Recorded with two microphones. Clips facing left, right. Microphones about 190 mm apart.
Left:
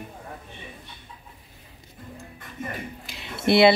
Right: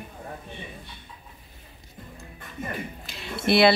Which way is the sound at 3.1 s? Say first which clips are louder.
Left 2 dB; 20° left (ahead or behind).